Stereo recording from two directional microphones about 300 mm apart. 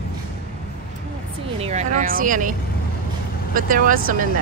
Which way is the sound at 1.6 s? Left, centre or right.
Right.